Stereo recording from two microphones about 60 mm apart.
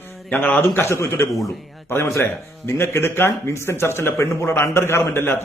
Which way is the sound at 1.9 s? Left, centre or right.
Left.